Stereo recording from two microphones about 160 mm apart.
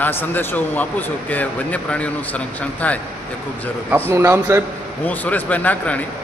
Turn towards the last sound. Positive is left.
turn(degrees=10)  # may be behind; listen again after turning